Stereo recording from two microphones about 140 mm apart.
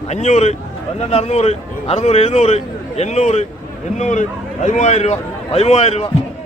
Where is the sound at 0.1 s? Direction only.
55° left (ahead or behind).